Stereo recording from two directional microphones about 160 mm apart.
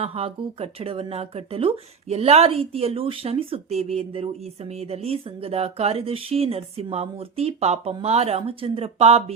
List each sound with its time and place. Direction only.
0.0 s speech: 35° right (ahead or behind)